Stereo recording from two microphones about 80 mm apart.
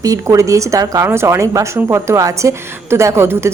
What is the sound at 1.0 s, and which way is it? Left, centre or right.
A woman's voice, right.